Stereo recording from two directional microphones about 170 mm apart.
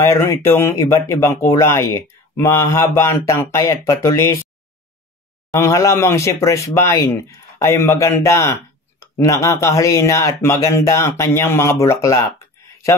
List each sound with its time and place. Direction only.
0.0 s speech: 15° left (ahead or behind)
5.5 s speech: 15° left (ahead or behind)